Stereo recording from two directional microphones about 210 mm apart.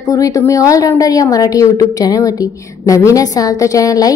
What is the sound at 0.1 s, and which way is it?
A woman's voice, 15° left (ahead or behind).